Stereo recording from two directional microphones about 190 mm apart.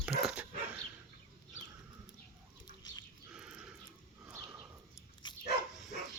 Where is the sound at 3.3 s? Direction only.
5° right (ahead or behind).